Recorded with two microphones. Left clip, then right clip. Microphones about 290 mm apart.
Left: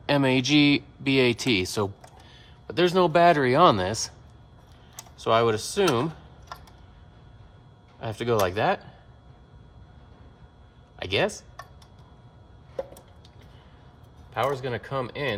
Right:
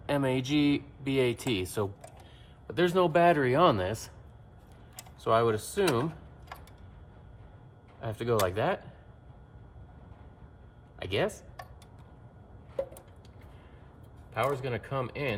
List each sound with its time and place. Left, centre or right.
0.0 s speech: left
5.2 s speech: left
8.0 s speech: left
10.9 s speech: left
14.3 s speech: centre